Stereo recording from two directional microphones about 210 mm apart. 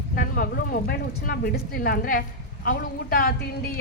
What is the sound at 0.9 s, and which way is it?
A woman's voice, 45° left (ahead or behind).